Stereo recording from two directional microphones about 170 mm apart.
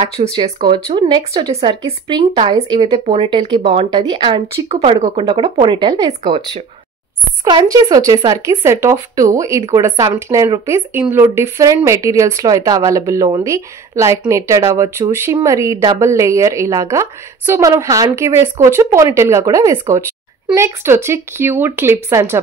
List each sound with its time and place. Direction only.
0.4 s speech: 30° right (ahead or behind)
7.4 s speech: 20° right (ahead or behind)